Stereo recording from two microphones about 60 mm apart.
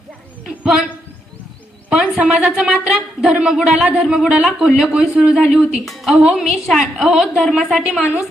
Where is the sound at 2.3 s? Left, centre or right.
Centre.